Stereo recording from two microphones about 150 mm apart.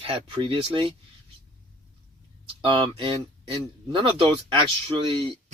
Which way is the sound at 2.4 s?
35° right (ahead or behind).